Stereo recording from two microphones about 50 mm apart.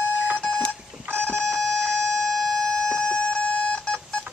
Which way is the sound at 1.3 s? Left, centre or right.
Centre.